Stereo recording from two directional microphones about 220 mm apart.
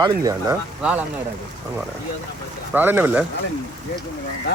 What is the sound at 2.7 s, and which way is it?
Speech, 10° right (ahead or behind).